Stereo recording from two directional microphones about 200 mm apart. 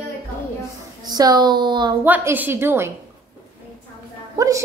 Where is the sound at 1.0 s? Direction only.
20° right (ahead or behind).